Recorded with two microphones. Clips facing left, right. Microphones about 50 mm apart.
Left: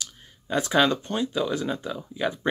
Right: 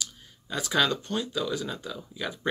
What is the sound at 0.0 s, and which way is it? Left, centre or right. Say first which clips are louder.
Speech: right 1 dB; left.